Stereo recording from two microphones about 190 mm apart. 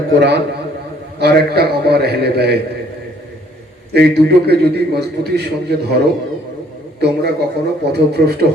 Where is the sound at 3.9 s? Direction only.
60° right (ahead or behind).